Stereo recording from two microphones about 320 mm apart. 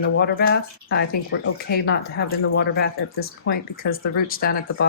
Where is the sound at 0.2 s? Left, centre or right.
Left.